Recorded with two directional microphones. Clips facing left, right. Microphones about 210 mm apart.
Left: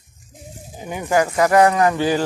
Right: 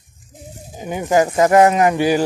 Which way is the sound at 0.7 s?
15° right (ahead or behind).